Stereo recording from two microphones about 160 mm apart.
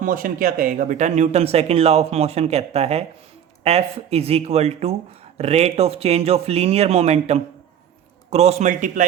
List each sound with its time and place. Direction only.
0.0 s a man's voice: 60° right (ahead or behind)